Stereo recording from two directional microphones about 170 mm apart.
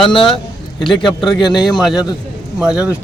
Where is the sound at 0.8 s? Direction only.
30° left (ahead or behind).